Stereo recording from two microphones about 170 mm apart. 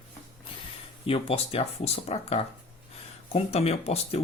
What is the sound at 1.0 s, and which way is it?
Speech, 35° left (ahead or behind).